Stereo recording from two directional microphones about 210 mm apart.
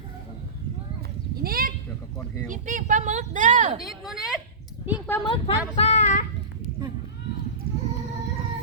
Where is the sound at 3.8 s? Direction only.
Centre (ahead or behind).